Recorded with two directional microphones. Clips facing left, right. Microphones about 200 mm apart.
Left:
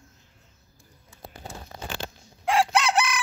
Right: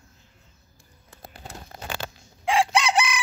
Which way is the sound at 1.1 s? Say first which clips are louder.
Left 1 dB; 60° right (ahead or behind).